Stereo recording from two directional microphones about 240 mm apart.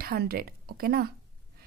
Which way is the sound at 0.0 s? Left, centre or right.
Right.